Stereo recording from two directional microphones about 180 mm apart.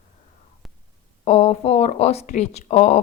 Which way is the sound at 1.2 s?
35° left (ahead or behind).